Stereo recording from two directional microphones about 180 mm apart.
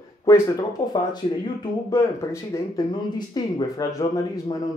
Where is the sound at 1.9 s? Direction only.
15° left (ahead or behind).